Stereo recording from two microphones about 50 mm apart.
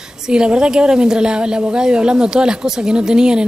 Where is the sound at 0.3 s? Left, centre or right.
Centre.